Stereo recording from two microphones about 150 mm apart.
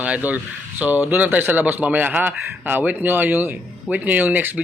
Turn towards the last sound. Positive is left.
turn(degrees=-10)  # may be behind; listen again after turning